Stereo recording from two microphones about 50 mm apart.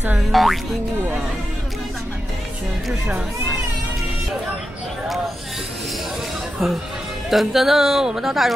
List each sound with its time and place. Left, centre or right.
0.3 s music: centre
6.6 s music: centre